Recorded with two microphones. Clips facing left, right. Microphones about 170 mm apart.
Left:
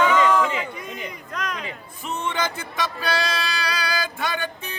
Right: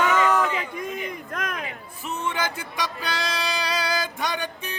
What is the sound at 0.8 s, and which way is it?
Run, 50° right (ahead or behind).